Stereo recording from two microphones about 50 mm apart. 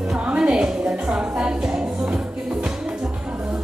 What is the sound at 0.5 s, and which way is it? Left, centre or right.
Music, centre.